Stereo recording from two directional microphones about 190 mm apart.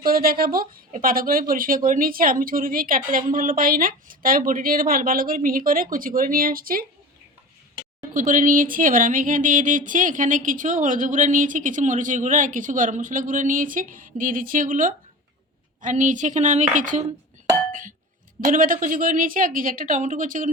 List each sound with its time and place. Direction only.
0.0 s speech: 50° right (ahead or behind)
8.1 s a woman's voice: 45° right (ahead or behind)
18.3 s speech: 45° right (ahead or behind)